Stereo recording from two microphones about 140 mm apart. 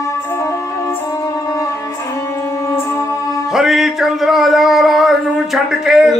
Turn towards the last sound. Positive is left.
turn(degrees=-5)  # may be behind; listen again after turning